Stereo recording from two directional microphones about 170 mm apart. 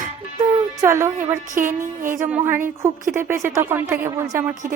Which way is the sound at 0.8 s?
15° right (ahead or behind).